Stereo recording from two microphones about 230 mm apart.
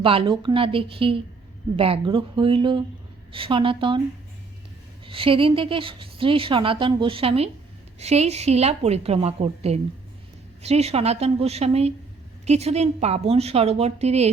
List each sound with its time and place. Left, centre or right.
0.0 s a woman's voice: right
5.0 s a woman's voice: right